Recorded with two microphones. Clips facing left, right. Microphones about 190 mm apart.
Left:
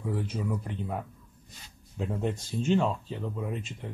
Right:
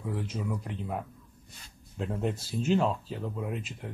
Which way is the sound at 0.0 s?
Centre (ahead or behind).